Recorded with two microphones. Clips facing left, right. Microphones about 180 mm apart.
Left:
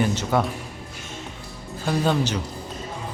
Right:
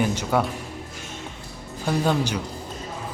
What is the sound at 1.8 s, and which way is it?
Speech, 10° right (ahead or behind).